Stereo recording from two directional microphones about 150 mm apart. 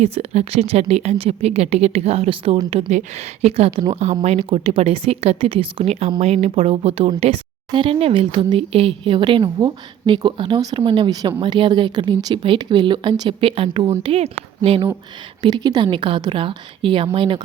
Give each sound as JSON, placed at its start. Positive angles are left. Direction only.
{"t": 0.0, "sound": "speech", "side_deg": -45}
{"t": 15.4, "sound": "speech", "side_deg": -30}